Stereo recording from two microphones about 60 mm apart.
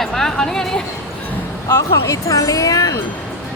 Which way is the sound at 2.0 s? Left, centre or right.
Left.